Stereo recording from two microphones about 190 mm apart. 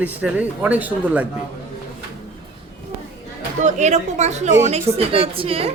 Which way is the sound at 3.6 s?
35° right (ahead or behind).